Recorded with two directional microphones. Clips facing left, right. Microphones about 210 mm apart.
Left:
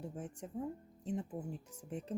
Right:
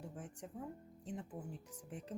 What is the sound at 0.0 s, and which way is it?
Speech, 25° left (ahead or behind).